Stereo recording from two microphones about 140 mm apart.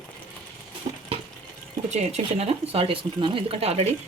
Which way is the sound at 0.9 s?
40° right (ahead or behind).